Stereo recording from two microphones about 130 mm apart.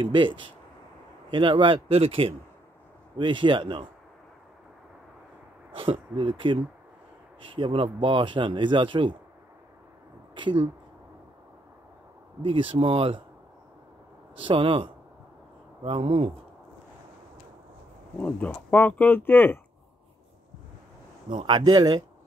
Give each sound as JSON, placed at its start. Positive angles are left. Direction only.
{"t": 0.0, "sound": "speech", "side_deg": -40}
{"t": 5.8, "sound": "speech", "side_deg": -40}
{"t": 10.3, "sound": "speech", "side_deg": -40}
{"t": 12.4, "sound": "speech", "side_deg": -40}
{"t": 14.4, "sound": "speech", "side_deg": -40}
{"t": 18.2, "sound": "speech", "side_deg": 10}
{"t": 21.3, "sound": "speech", "side_deg": -35}